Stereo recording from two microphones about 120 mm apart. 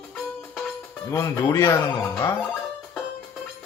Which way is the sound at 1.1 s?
25° left (ahead or behind).